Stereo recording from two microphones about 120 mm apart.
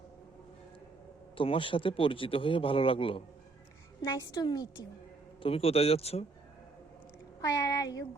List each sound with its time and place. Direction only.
1.4 s a man's voice: 45° left (ahead or behind)
4.0 s a woman's voice: 35° left (ahead or behind)
5.4 s a man's voice: 50° left (ahead or behind)
7.4 s speech: 30° left (ahead or behind)